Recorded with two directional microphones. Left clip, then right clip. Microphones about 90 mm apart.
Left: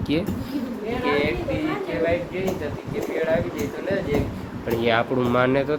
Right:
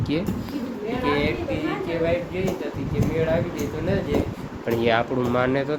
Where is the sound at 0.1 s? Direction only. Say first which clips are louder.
Left 2 dB; 5° left (ahead or behind).